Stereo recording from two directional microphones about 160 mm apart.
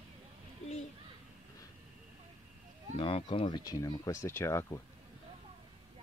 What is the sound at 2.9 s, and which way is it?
Speech, 35° left (ahead or behind).